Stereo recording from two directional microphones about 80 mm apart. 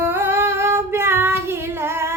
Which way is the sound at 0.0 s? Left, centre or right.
Right.